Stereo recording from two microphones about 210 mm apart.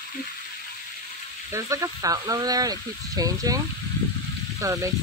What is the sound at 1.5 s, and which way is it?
Speech, 15° right (ahead or behind).